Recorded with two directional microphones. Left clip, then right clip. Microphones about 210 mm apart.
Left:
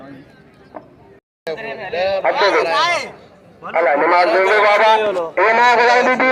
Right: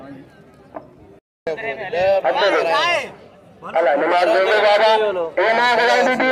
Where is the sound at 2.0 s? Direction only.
30° right (ahead or behind).